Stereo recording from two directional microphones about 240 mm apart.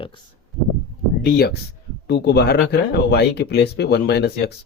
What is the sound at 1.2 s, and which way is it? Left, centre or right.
Speech, left.